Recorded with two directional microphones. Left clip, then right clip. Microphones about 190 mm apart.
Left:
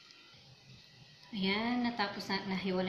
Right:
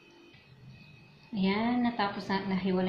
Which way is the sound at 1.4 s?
15° right (ahead or behind).